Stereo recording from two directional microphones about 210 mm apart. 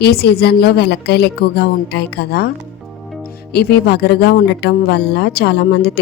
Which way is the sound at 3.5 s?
50° left (ahead or behind).